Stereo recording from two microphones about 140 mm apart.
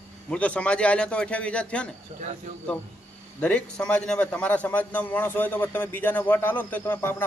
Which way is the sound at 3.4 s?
10° left (ahead or behind).